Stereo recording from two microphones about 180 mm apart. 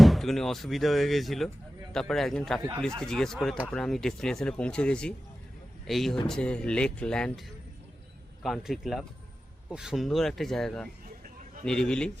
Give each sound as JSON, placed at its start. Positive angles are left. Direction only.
{"t": 0.0, "sound": "speech", "side_deg": 0}
{"t": 2.6, "sound": "speech", "side_deg": -25}
{"t": 3.0, "sound": "speech", "side_deg": 5}
{"t": 8.4, "sound": "speech", "side_deg": 0}